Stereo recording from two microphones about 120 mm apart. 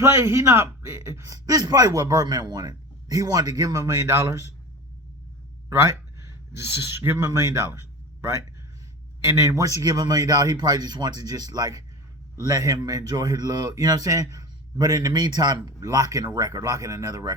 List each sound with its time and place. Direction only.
0.0 s a man's voice: 20° right (ahead or behind)
5.6 s a man's voice: 25° right (ahead or behind)